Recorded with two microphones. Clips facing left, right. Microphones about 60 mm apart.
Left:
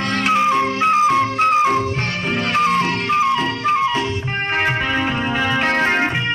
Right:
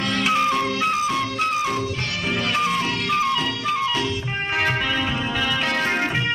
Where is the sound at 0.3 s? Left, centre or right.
Left.